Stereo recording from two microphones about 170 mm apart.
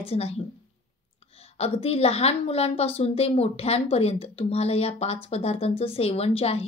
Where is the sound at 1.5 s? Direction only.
35° left (ahead or behind).